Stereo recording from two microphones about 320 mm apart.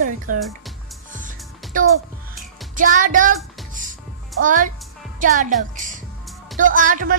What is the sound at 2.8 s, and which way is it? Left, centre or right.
A woman's voice, right.